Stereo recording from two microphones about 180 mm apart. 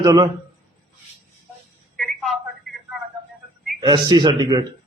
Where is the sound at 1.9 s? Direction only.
Centre (ahead or behind).